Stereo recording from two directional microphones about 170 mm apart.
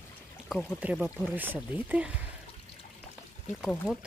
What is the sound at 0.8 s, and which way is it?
Speech, 10° right (ahead or behind).